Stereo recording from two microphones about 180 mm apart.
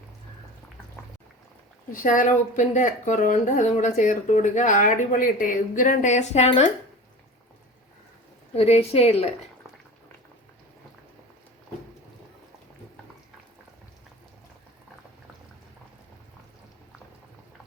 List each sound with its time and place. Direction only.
1.9 s speech: 45° left (ahead or behind)
8.5 s a woman's voice: 35° left (ahead or behind)